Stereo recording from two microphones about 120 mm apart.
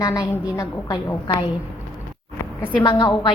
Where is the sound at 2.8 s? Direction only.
40° left (ahead or behind).